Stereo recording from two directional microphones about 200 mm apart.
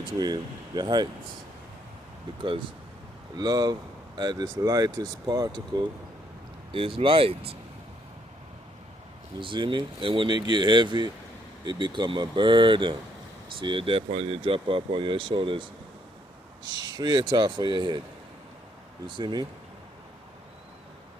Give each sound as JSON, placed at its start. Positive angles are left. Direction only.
{"t": 0.0, "sound": "speech", "side_deg": -20}
{"t": 2.4, "sound": "speech", "side_deg": -25}
{"t": 9.4, "sound": "speech", "side_deg": -25}
{"t": 19.0, "sound": "speech", "side_deg": -20}